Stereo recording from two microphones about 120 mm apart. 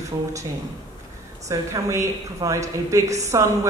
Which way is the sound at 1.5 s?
25° right (ahead or behind).